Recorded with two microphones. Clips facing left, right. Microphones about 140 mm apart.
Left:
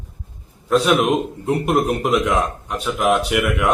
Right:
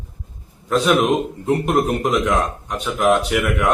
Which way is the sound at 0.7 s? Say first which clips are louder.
Even; 5° left (ahead or behind).